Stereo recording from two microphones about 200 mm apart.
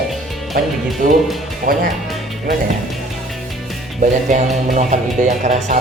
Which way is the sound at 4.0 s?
35° right (ahead or behind).